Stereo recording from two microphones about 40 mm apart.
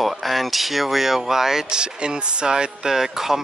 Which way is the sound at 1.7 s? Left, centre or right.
Right.